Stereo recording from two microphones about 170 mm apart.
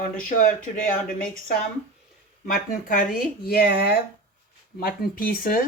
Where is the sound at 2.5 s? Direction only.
55° left (ahead or behind); by 4.0 s 70° left (ahead or behind).